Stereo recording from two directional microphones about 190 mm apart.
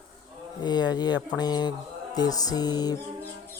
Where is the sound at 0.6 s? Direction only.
20° left (ahead or behind).